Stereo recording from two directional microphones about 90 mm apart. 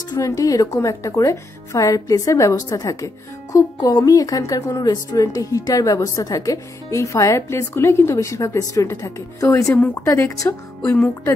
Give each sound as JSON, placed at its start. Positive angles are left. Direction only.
{"t": 0.1, "sound": "a woman's voice", "side_deg": 40}